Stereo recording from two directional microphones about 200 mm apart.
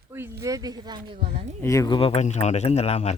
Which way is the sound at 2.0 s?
30° left (ahead or behind).